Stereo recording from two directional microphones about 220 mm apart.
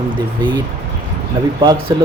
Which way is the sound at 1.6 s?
20° right (ahead or behind).